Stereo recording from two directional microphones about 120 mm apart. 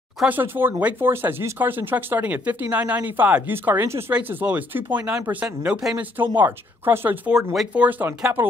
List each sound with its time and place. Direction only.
0.3 s speech: 15° right (ahead or behind)
6.1 s speech: 15° right (ahead or behind)